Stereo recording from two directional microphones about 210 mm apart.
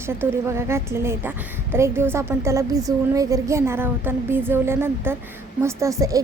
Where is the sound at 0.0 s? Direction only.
10° right (ahead or behind).